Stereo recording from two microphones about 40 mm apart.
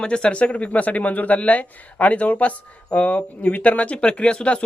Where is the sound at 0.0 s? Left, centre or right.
Left.